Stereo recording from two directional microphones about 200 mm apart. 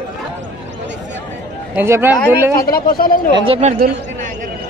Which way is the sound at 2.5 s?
50° left (ahead or behind).